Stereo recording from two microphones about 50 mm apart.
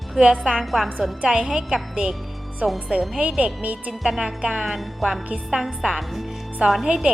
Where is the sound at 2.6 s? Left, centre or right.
Right.